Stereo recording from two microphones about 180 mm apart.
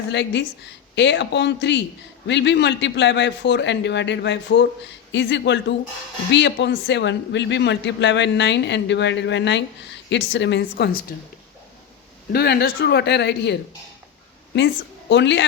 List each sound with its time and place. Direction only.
0.1 s speech: 75° left (ahead or behind)
12.3 s speech: 65° left (ahead or behind)
15.1 s speech: 80° left